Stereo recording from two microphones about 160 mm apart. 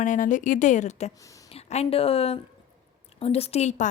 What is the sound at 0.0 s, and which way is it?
A woman's voice, 55° left (ahead or behind).